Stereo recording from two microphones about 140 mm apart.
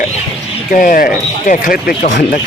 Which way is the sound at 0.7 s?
75° left (ahead or behind).